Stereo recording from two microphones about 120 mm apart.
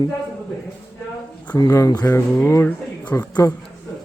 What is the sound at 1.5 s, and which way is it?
Speech, 30° left (ahead or behind).